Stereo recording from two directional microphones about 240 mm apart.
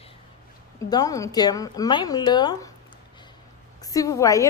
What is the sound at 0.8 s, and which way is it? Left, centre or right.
A woman's voice, centre.